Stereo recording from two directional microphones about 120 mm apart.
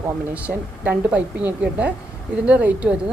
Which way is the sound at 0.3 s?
10° right (ahead or behind).